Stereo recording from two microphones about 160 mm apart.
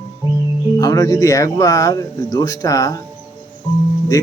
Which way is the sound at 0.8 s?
25° left (ahead or behind).